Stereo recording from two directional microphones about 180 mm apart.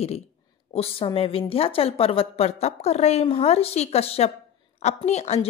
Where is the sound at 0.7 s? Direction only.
30° left (ahead or behind).